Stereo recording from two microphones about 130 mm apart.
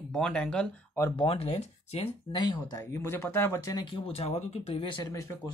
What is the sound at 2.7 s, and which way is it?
Speech, 20° left (ahead or behind).